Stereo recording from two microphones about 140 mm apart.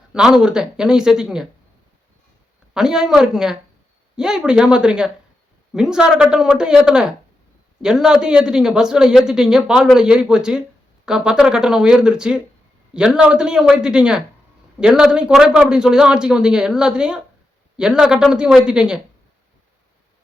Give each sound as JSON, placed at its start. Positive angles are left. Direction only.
{"t": 0.1, "sound": "a man's voice", "side_deg": -5}
{"t": 2.7, "sound": "a man's voice", "side_deg": -5}